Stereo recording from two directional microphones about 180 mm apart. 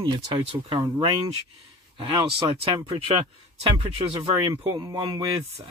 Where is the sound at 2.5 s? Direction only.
30° right (ahead or behind).